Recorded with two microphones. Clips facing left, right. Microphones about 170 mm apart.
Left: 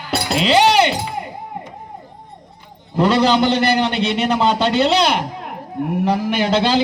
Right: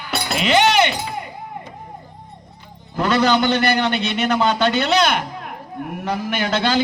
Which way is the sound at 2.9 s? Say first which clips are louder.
Left 2 dB; 30° left (ahead or behind).